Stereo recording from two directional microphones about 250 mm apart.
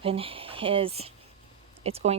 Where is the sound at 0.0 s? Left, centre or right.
Right.